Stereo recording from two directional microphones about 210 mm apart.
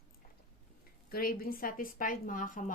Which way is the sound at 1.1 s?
45° left (ahead or behind).